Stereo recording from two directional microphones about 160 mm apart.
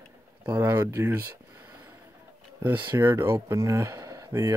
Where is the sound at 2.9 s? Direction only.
15° right (ahead or behind).